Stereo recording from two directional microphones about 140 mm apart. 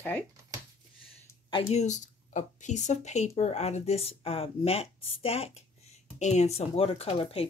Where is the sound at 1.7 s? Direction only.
55° left (ahead or behind).